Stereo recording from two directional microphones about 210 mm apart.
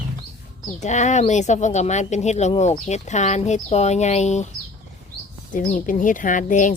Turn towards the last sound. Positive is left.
turn(degrees=40)  # may be behind; listen again after turning